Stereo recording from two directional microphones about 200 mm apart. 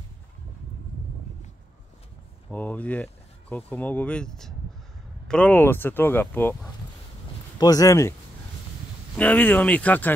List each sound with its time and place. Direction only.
2.5 s speech: 10° left (ahead or behind)
9.1 s speech: 10° left (ahead or behind)